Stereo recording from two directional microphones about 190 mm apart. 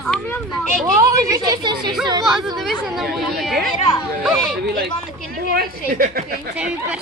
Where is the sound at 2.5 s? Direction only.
Centre (ahead or behind).